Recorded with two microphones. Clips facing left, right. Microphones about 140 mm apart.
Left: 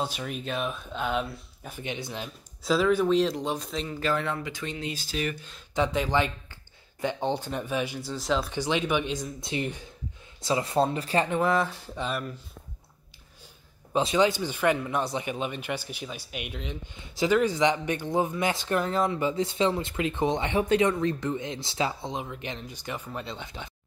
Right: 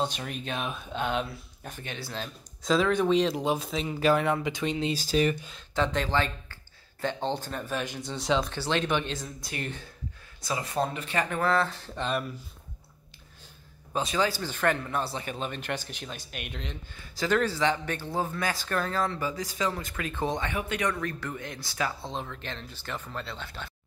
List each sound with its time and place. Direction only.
0.0 s speech: 5° left (ahead or behind)
1.8 s speech: 20° left (ahead or behind)
2.6 s speech: 5° left (ahead or behind)
4.0 s speech: 15° right (ahead or behind)
4.9 s speech: 35° right (ahead or behind)
5.8 s speech: 10° left (ahead or behind)
10.4 s speech: 25° left (ahead or behind)
11.2 s speech: 15° left (ahead or behind)
13.9 s speech: 20° left (ahead or behind)
16.9 s speech: 20° left (ahead or behind)